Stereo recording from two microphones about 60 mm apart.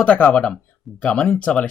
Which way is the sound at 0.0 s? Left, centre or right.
Left.